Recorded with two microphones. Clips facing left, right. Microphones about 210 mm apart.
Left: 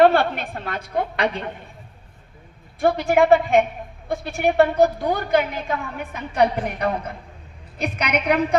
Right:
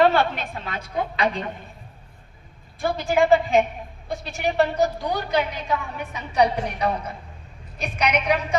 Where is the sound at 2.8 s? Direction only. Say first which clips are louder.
Left 4 dB; 60° left (ahead or behind).